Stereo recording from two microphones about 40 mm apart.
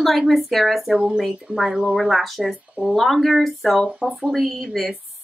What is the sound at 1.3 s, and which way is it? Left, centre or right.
Speech, centre.